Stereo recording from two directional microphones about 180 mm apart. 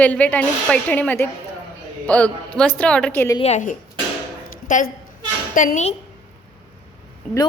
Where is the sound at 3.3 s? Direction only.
40° left (ahead or behind).